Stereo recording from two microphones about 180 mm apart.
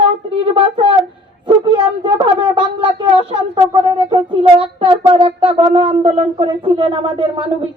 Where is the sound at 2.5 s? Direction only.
25° right (ahead or behind).